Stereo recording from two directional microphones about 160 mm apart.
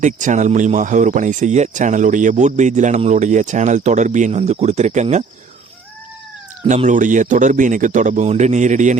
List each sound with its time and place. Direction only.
0.0 s speech: 50° right (ahead or behind)
6.7 s speech: 50° right (ahead or behind)